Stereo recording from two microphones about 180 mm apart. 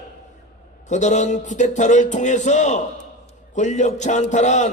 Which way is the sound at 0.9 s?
40° left (ahead or behind).